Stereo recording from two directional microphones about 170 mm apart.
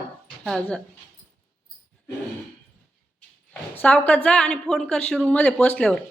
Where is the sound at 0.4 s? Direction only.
Centre (ahead or behind).